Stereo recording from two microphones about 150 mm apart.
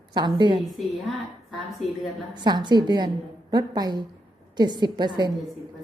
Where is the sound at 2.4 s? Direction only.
30° right (ahead or behind).